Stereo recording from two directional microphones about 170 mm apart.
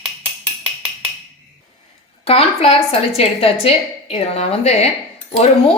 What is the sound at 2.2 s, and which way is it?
A woman's voice, 35° left (ahead or behind).